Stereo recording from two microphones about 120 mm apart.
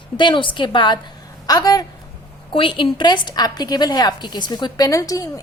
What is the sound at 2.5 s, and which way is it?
A woman's voice, 45° left (ahead or behind).